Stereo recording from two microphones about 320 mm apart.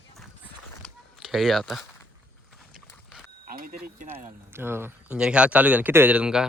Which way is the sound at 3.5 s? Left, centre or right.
Right.